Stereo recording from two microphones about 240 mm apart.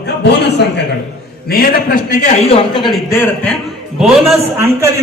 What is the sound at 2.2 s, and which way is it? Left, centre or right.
Speech, left.